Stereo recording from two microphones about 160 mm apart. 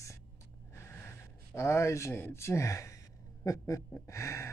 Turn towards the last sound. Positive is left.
turn(degrees=20)  # may be behind; listen again after turning